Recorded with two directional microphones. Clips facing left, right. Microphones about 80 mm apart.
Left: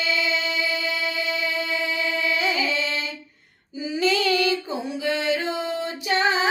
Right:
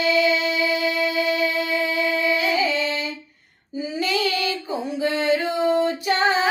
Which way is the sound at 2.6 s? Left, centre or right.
Right.